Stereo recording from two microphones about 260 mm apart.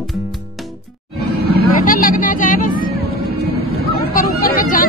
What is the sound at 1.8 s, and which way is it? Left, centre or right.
Music, left.